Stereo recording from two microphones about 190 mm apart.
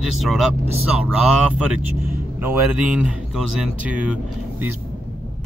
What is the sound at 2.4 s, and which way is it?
Speech, 10° right (ahead or behind).